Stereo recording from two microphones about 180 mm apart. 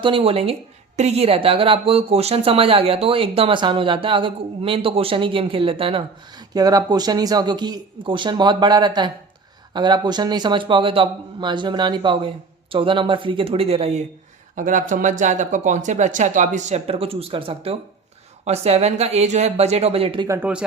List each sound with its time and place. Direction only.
0.0 s speech: 30° right (ahead or behind)
14.5 s speech: 45° right (ahead or behind)
20.2 s speech: 15° right (ahead or behind)